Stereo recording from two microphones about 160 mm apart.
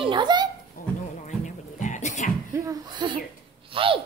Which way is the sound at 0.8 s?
60° left (ahead or behind).